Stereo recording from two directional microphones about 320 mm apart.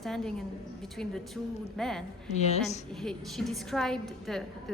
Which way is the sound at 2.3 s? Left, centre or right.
Left.